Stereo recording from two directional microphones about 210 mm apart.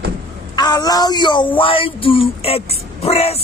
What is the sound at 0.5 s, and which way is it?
Speech, 20° left (ahead or behind).